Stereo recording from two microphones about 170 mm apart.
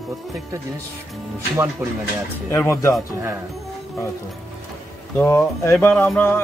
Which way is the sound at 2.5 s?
15° left (ahead or behind).